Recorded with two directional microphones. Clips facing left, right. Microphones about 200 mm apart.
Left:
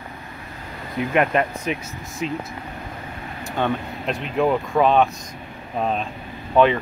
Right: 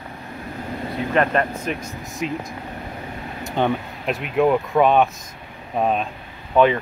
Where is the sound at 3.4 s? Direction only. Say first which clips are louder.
Right 2 dB; 20° right (ahead or behind).